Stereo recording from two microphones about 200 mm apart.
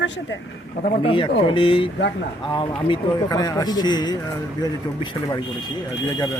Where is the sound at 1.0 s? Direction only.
25° left (ahead or behind).